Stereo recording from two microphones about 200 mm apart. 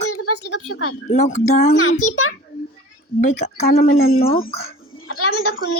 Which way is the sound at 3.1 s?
35° left (ahead or behind).